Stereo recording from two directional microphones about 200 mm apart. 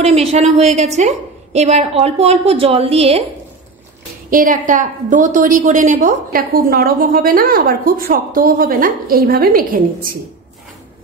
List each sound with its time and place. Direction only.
0.0 s a woman's voice: 30° right (ahead or behind)
4.3 s a woman's voice: 45° right (ahead or behind)